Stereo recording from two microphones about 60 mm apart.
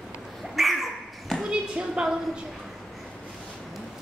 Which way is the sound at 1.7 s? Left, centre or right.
Centre.